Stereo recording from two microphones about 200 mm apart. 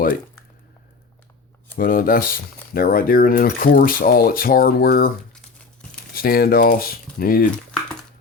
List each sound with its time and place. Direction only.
1.7 s speech: 45° left (ahead or behind)
6.1 s speech: 50° left (ahead or behind)